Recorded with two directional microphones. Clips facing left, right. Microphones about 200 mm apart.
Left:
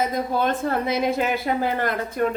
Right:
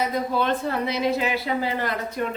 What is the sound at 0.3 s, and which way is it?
A woman's voice, 50° left (ahead or behind).